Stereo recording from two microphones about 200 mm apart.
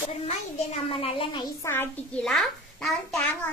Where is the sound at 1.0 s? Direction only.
25° left (ahead or behind).